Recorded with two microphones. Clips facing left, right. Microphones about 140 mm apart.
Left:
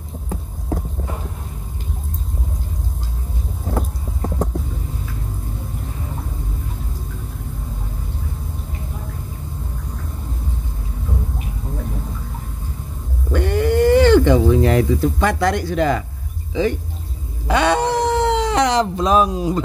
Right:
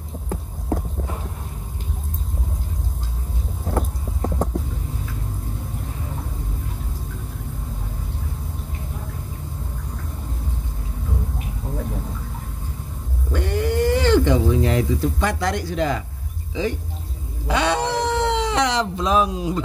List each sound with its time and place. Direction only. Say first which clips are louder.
0.3 s music: right 1 dB; centre (ahead or behind)
3.6 s vehicle: even; centre (ahead or behind)
13.3 s cat: left 5 dB; 60° left (ahead or behind)
17.5 s speech: left 4 dB; 55° left (ahead or behind)